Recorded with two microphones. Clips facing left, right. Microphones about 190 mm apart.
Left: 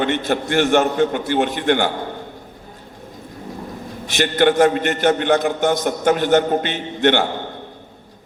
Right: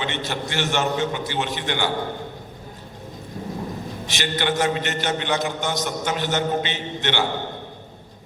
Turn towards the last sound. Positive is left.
turn(degrees=55)  # may be behind; listen again after turning